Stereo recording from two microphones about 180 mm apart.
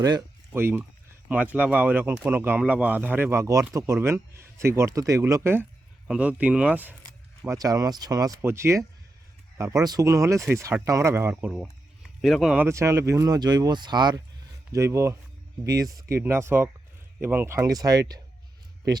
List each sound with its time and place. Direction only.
0.0 s speech: 15° right (ahead or behind)
12.6 s speech: 15° right (ahead or behind)